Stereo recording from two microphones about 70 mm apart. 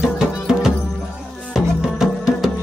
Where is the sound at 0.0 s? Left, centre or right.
Centre.